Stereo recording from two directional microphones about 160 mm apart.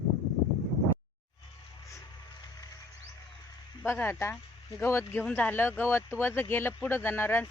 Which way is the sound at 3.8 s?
15° left (ahead or behind).